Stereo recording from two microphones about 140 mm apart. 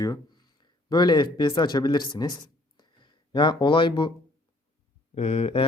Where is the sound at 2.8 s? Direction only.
35° left (ahead or behind).